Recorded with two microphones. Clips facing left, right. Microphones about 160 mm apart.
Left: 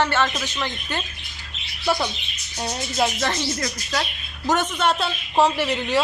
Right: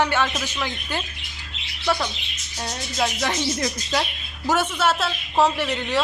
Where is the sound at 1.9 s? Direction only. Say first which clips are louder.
Left 1 dB; 5° left (ahead or behind).